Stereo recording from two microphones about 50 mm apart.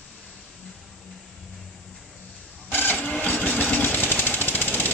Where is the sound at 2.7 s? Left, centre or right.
Left.